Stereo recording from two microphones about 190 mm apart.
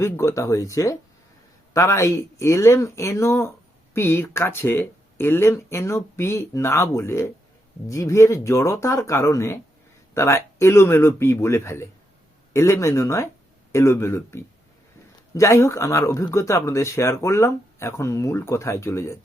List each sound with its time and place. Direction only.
0.0 s speech: 15° left (ahead or behind)